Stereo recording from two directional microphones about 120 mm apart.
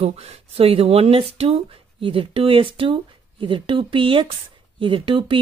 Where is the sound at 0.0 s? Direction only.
60° right (ahead or behind).